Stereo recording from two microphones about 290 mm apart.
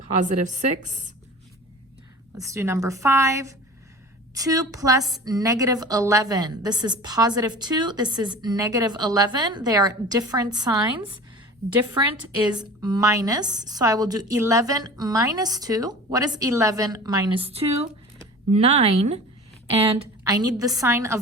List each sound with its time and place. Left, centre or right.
0.2 s a woman's voice: right
2.4 s a woman's voice: centre